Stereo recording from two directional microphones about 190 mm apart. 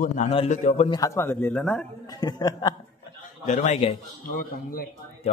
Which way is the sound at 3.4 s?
40° left (ahead or behind).